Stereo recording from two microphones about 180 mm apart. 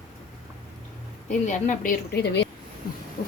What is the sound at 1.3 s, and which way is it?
A woman's voice, 40° left (ahead or behind).